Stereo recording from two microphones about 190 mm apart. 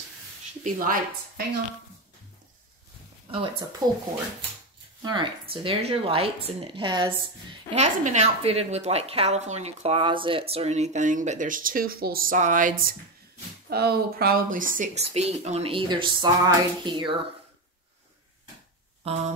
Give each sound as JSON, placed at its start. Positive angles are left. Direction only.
{"t": 0.7, "sound": "a woman's voice", "side_deg": -45}
{"t": 3.8, "sound": "speech", "side_deg": -20}
{"t": 5.0, "sound": "speech", "side_deg": -25}
{"t": 7.7, "sound": "a woman's voice", "side_deg": -40}
{"t": 19.0, "sound": "a woman's voice", "side_deg": -35}